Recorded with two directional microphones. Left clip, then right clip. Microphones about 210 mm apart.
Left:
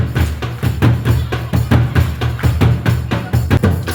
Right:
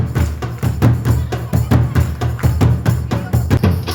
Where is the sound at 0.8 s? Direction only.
45° right (ahead or behind).